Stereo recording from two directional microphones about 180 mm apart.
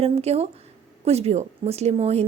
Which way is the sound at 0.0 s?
35° right (ahead or behind).